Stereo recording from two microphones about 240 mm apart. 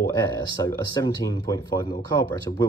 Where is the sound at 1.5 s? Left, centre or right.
Centre.